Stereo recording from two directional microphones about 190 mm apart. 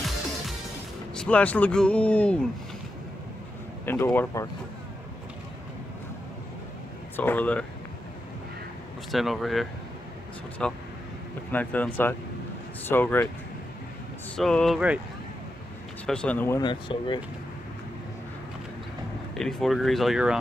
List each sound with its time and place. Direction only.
1.1 s speech: 5° left (ahead or behind)
3.8 s speech: 10° left (ahead or behind)
7.2 s speech: 10° left (ahead or behind)
9.1 s speech: centre (ahead or behind)
14.3 s speech: 5° left (ahead or behind)
16.1 s speech: 5° left (ahead or behind)
16.6 s speech: 25° left (ahead or behind)
19.3 s speech: centre (ahead or behind)